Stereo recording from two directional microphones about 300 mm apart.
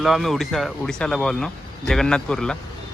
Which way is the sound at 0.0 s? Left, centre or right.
Centre.